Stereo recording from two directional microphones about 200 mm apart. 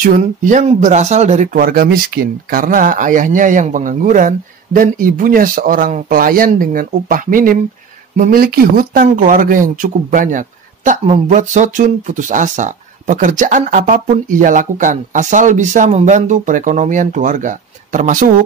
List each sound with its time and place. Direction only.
0.0 s speech: 40° right (ahead or behind)